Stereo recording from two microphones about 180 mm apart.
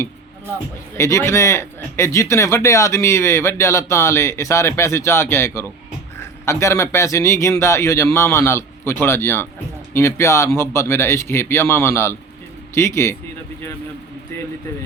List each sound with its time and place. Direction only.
0.9 s speech: 15° left (ahead or behind)